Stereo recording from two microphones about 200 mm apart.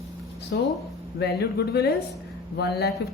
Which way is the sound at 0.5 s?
55° left (ahead or behind).